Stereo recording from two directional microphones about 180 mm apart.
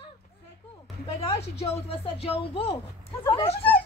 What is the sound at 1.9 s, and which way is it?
Speech, 30° left (ahead or behind).